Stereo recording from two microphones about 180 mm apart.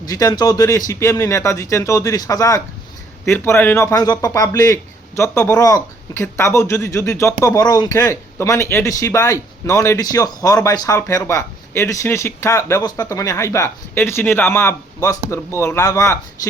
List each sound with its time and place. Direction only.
0.0 s speech: 20° left (ahead or behind)